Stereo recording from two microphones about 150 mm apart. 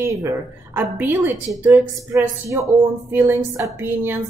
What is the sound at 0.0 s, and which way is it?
A woman's voice, 20° right (ahead or behind).